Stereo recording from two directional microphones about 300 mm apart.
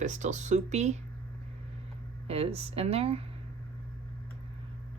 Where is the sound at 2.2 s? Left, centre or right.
Centre.